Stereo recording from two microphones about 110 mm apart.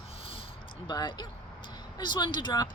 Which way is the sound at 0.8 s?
40° left (ahead or behind).